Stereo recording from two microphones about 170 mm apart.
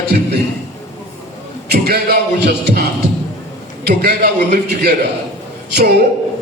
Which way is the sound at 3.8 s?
70° right (ahead or behind).